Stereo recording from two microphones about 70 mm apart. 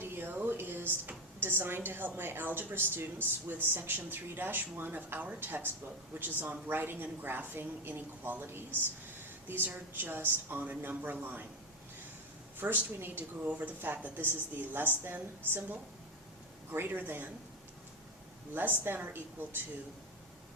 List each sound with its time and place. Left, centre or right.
0.0 s a woman's voice: right
12.5 s a woman's voice: right
18.5 s a woman's voice: right